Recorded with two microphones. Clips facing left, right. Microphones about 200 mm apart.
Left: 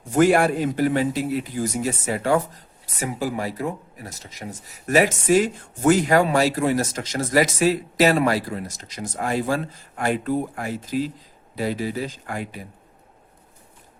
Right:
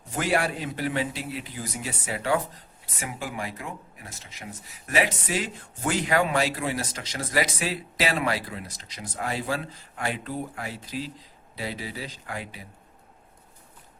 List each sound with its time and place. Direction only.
0.2 s a man's voice: 50° left (ahead or behind)